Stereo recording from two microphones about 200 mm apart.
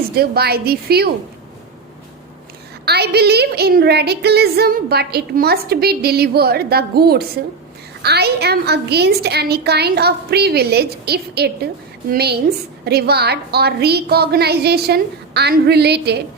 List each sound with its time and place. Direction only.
0.1 s a woman's voice: 50° right (ahead or behind)
2.8 s a woman's voice: 55° right (ahead or behind)